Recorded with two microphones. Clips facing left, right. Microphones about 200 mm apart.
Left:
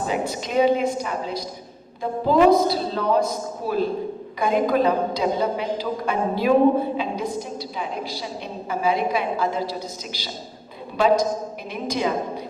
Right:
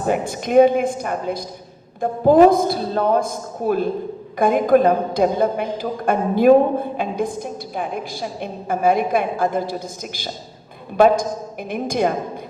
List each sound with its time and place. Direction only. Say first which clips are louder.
0.0 s a woman's voice: right 4 dB; 55° right (ahead or behind)
10.9 s a woman's voice: right 4 dB; 55° right (ahead or behind)